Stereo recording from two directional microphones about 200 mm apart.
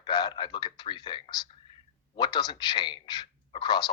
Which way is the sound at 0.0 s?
20° left (ahead or behind).